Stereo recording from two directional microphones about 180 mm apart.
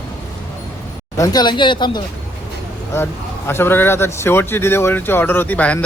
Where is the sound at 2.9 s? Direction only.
15° left (ahead or behind).